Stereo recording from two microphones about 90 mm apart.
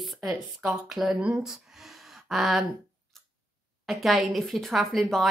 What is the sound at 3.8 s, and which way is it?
Speech, centre (ahead or behind).